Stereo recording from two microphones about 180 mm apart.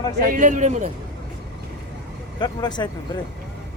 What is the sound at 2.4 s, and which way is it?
Speech, 25° left (ahead or behind).